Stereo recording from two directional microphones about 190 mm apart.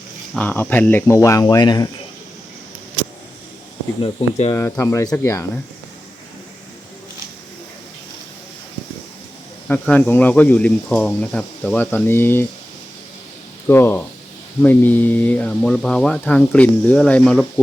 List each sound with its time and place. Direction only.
0.3 s speech: 10° left (ahead or behind)
4.0 s speech: 30° left (ahead or behind)
4.5 s speech: 15° left (ahead or behind)
9.6 s speech: 10° left (ahead or behind)
13.7 s speech: 10° left (ahead or behind)